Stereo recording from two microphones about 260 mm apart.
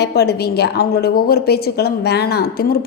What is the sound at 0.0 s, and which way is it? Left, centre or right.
A woman's voice, left.